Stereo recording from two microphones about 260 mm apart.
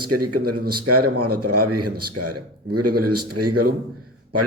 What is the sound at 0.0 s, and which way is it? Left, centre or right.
A man's voice, right.